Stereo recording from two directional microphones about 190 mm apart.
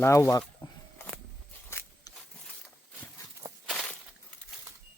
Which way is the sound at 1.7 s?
10° left (ahead or behind).